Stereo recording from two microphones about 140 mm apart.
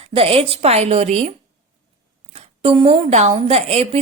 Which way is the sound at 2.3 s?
45° right (ahead or behind).